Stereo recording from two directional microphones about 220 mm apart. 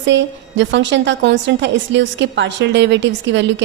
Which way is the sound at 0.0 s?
55° right (ahead or behind).